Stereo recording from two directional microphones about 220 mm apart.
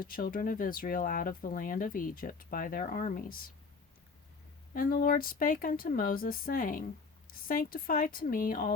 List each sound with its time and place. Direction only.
0.0 s speech: 40° left (ahead or behind)
4.7 s speech: 40° left (ahead or behind)